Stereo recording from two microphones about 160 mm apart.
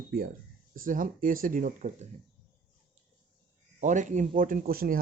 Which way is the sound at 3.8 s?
50° right (ahead or behind).